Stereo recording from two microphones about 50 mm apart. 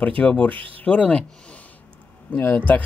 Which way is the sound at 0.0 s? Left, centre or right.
Left.